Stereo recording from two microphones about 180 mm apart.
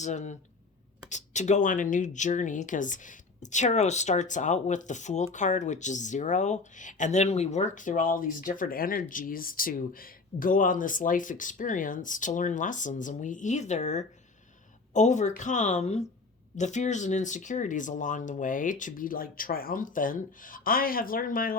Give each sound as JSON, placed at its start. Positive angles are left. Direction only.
{"t": 0.0, "sound": "speech", "side_deg": 40}